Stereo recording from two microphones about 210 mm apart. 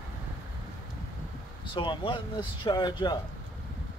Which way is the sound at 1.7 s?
25° left (ahead or behind).